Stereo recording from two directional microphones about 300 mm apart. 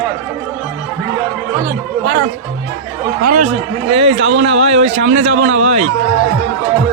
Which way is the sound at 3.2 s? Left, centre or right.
Right.